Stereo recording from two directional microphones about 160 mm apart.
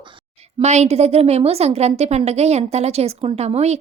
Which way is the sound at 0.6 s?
45° right (ahead or behind).